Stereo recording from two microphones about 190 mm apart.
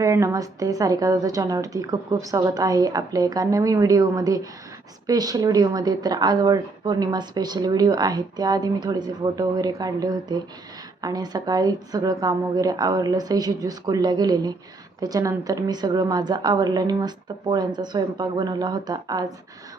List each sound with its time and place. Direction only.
0.0 s a woman's voice: 15° right (ahead or behind)